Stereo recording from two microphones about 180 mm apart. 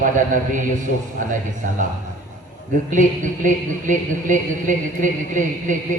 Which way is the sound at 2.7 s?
45° right (ahead or behind).